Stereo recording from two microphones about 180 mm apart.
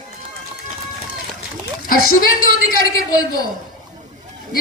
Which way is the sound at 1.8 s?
50° left (ahead or behind).